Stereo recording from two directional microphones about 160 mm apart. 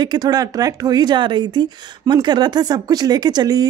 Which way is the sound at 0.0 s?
25° right (ahead or behind).